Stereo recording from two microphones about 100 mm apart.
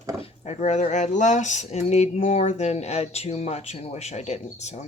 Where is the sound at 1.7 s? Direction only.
90° left.